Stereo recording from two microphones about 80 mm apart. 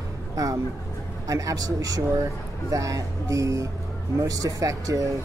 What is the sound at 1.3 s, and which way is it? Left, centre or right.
Speech, right.